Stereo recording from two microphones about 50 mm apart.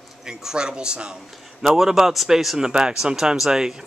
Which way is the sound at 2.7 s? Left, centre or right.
Centre.